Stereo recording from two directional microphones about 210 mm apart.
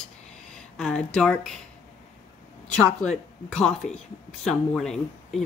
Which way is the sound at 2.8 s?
5° left (ahead or behind).